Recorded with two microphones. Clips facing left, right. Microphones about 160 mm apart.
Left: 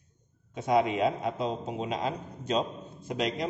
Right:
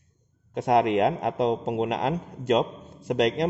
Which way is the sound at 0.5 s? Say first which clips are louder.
Right 5 dB; 75° right (ahead or behind).